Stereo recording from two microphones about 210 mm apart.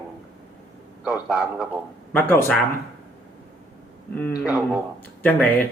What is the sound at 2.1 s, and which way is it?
Speech, 10° left (ahead or behind).